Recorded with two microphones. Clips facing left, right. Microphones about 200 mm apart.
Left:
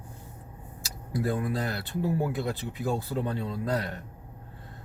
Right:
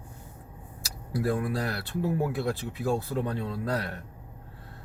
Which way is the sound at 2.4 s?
15° left (ahead or behind).